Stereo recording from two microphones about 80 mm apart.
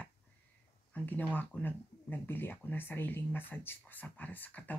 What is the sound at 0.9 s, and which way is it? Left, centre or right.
Speech, left.